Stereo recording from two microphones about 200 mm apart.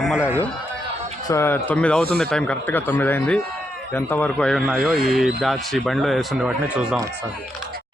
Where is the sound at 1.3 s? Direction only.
10° left (ahead or behind).